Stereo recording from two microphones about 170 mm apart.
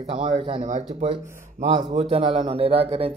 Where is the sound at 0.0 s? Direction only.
40° right (ahead or behind).